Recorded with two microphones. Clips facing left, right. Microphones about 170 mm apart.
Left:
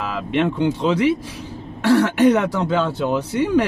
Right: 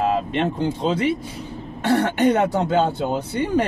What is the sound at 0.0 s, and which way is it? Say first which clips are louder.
Speech: even; 80° left.